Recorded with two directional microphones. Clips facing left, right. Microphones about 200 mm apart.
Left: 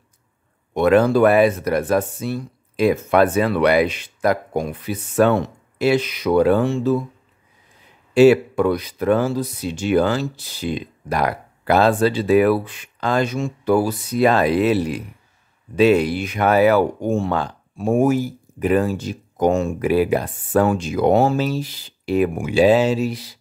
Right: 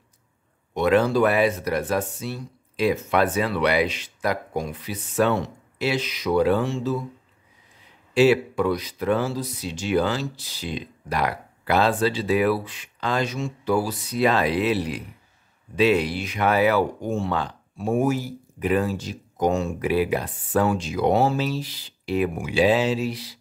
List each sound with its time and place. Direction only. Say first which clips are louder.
0.7 s speech: left 5 dB; 50° left (ahead or behind)
8.1 s speech: left 6 dB; 50° left (ahead or behind)